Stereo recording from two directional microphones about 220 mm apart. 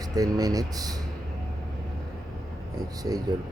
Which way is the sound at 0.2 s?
15° right (ahead or behind).